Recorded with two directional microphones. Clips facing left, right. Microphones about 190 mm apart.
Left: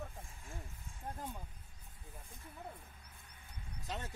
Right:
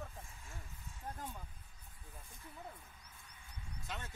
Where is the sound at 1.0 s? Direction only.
25° left (ahead or behind).